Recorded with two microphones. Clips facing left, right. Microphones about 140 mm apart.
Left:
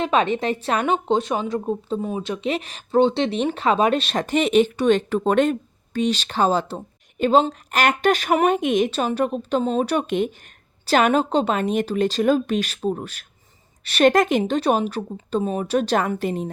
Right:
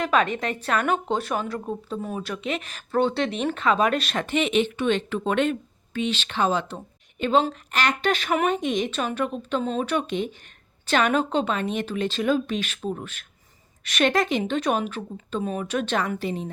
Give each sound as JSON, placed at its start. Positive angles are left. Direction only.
{"t": 0.0, "sound": "a woman's voice", "side_deg": 30}
{"t": 2.9, "sound": "speech", "side_deg": 25}
{"t": 8.9, "sound": "speech", "side_deg": 35}
{"t": 14.1, "sound": "speech", "side_deg": 45}